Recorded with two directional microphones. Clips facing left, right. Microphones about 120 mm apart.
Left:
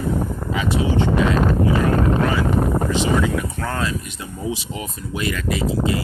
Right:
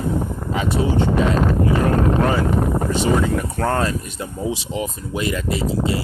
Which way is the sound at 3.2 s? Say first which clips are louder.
Right 3 dB; 40° right (ahead or behind).